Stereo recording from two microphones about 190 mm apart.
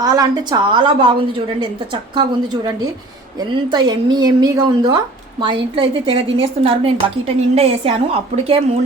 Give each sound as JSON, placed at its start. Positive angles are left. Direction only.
{"t": 0.0, "sound": "a woman's voice", "side_deg": -20}